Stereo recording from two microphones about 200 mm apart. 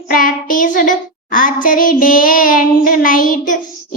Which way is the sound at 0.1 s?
45° left (ahead or behind).